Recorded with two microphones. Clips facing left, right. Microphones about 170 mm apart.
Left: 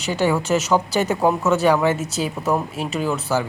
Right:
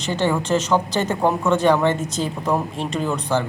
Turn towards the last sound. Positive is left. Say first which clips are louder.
# even
turn(degrees=5)  # may be behind; listen again after turning